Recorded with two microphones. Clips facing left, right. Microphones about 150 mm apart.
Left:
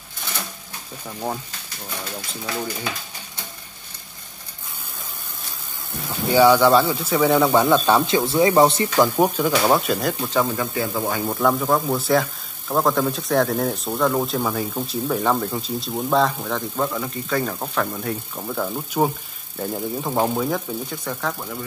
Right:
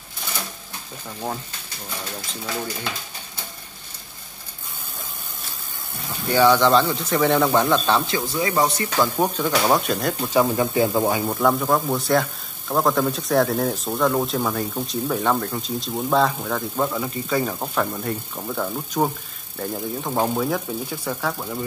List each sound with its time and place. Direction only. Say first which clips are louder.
2.4 s speech: left 1 dB; 5° left (ahead or behind)
6.2 s speech: left 2 dB; 10° left (ahead or behind)
8.2 s speech: left 6 dB; 25° left (ahead or behind); by 10.3 s centre (ahead or behind)
10.3 s a man's voice: right 6 dB; 15° right (ahead or behind)
11.1 s speech: even; centre (ahead or behind)